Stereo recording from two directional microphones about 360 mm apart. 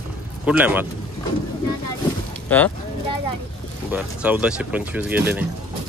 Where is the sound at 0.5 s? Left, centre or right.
Centre.